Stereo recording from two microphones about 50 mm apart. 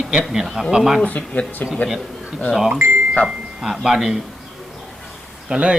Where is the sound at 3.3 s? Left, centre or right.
Centre.